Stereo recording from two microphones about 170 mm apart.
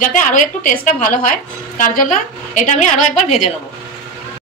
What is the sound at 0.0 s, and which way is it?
A woman's voice, 50° left (ahead or behind).